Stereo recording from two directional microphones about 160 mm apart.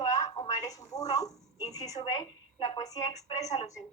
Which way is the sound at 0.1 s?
25° left (ahead or behind).